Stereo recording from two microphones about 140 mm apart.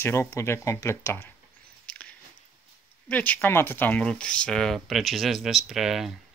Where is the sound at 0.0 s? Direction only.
20° left (ahead or behind).